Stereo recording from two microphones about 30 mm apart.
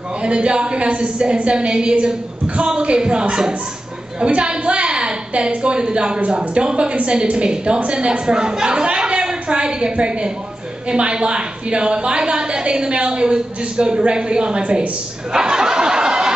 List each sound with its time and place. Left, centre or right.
0.2 s a woman's voice: right
14.6 s a woman's voice: right
15.3 s a sound: right